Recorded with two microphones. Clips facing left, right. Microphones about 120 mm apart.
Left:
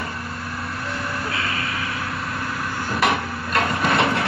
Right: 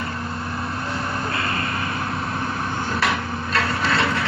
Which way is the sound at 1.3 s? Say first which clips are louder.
Right 2 dB; centre (ahead or behind).